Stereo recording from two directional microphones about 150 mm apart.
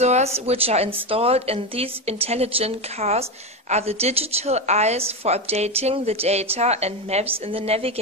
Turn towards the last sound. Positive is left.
turn(degrees=-40)  # may be behind; listen again after turning